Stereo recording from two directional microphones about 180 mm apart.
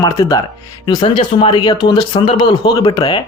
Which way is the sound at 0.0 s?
20° left (ahead or behind).